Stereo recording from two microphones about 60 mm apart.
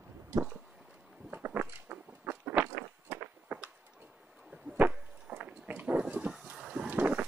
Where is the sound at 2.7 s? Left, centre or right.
Right.